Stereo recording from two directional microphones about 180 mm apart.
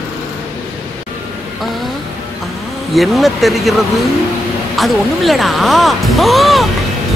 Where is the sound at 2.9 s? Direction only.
Centre (ahead or behind).